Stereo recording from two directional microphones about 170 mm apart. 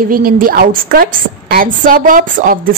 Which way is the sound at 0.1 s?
55° right (ahead or behind).